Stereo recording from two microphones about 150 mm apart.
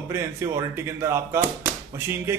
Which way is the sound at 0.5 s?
20° right (ahead or behind).